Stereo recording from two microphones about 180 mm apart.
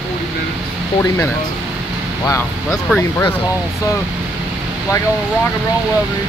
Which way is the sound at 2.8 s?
5° left (ahead or behind).